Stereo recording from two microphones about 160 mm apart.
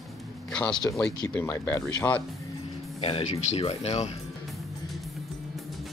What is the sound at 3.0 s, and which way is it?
Speech, 35° left (ahead or behind).